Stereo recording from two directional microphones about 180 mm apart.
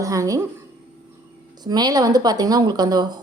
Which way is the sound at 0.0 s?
20° right (ahead or behind).